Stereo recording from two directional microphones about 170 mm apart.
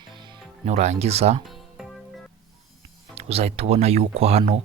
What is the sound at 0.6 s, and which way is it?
Speech, 40° right (ahead or behind).